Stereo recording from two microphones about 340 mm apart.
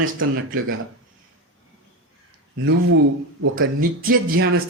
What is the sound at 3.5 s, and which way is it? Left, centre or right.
Speech, right.